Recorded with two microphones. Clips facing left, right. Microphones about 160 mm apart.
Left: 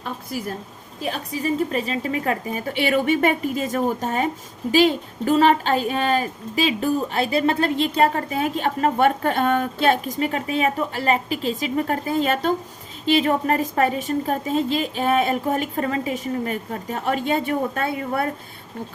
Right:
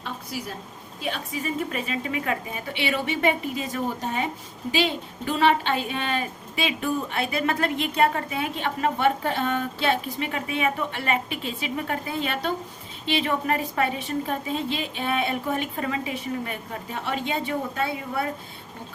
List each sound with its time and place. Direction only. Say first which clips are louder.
0.0 s a sound: left 4 dB; 50° left (ahead or behind)
1.0 s speech: left 4 dB; 40° left (ahead or behind)
2.7 s a woman's voice: left 7 dB; 50° left (ahead or behind)